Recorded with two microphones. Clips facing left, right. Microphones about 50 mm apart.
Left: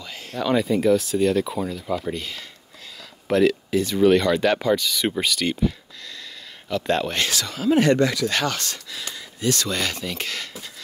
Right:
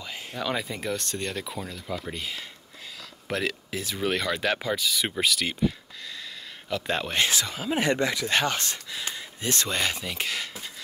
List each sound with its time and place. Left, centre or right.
0.0 s a sound: centre
0.4 s speech: centre
7.2 s speech: centre